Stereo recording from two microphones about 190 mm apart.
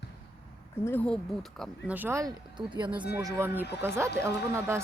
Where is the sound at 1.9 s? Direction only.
10° right (ahead or behind).